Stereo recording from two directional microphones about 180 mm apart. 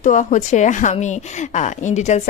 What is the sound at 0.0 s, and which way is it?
A woman's voice, 45° left (ahead or behind).